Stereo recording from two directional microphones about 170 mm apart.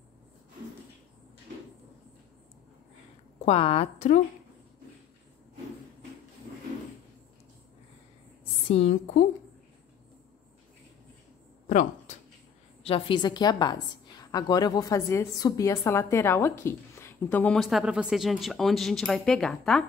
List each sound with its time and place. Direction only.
3.4 s a woman's voice: 35° left (ahead or behind)
8.6 s a woman's voice: 40° left (ahead or behind)
12.8 s a woman's voice: 30° left (ahead or behind); by 17.6 s 10° left (ahead or behind)
17.6 s speech: centre (ahead or behind)